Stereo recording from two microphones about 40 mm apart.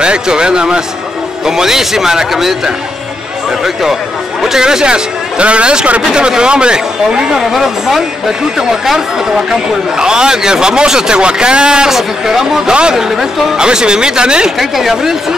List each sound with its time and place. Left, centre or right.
0.0 s a man's voice: right
4.6 s a man's voice: centre
7.5 s a man's voice: centre; by 11.9 s right
11.9 s speech: centre
13.6 s a man's voice: right
14.6 s speech: centre